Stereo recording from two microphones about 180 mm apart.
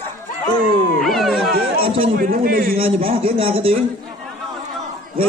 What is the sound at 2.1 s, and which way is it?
Speech, 50° right (ahead or behind).